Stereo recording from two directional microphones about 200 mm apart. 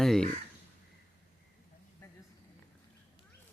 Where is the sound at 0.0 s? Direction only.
Centre (ahead or behind).